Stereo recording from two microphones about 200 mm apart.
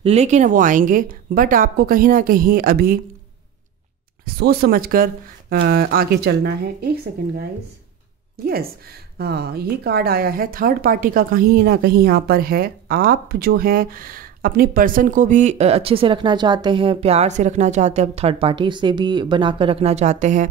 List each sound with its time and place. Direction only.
0.0 s a woman's voice: 35° right (ahead or behind)
4.2 s a woman's voice: 50° right (ahead or behind)
9.2 s a woman's voice: 55° right (ahead or behind); by 20.4 s 35° right (ahead or behind)